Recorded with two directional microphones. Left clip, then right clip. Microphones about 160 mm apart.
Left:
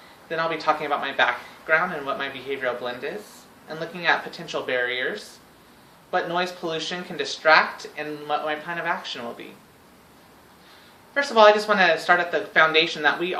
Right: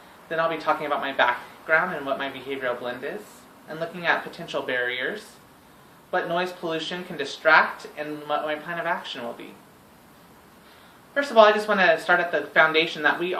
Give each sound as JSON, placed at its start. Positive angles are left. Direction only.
{"t": 0.3, "sound": "speech", "side_deg": 20}
{"t": 11.1, "sound": "speech", "side_deg": 20}